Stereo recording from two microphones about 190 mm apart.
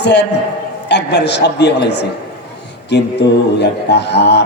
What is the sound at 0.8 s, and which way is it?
A man's voice, 65° left (ahead or behind).